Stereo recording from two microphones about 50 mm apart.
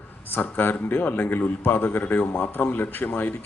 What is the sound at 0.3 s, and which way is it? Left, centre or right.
A man's voice, left.